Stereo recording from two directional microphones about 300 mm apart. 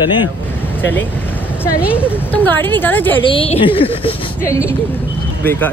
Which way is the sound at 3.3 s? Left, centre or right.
Centre.